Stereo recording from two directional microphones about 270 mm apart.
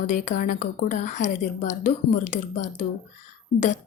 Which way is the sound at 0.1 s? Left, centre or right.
Left.